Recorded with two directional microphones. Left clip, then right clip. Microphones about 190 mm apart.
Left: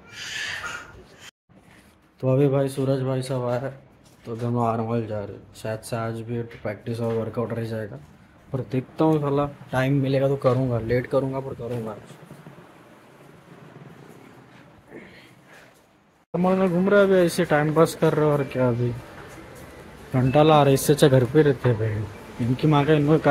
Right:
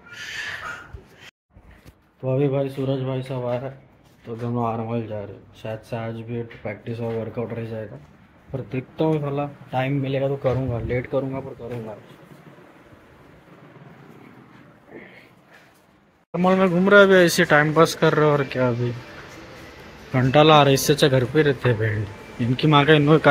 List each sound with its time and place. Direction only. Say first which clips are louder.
2.3 s speech: left 1 dB; 25° left (ahead or behind)
16.3 s speech: right 3 dB; 5° left (ahead or behind)
20.1 s speech: right 3 dB; 10° left (ahead or behind)
20.9 s speech: left 1 dB; 25° left (ahead or behind)
22.6 s speech: right 4 dB; 10° left (ahead or behind)